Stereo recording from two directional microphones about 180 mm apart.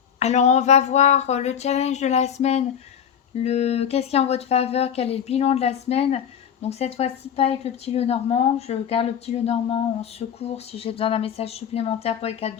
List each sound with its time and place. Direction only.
0.2 s speech: 40° left (ahead or behind)